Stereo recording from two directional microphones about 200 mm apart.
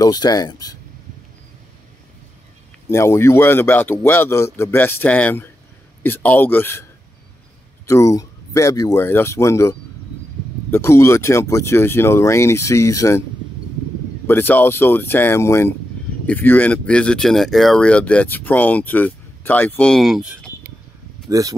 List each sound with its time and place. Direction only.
0.0 s speech: 20° left (ahead or behind)
2.9 s speech: 15° left (ahead or behind)
14.2 s speech: 10° left (ahead or behind)
21.3 s speech: 15° right (ahead or behind)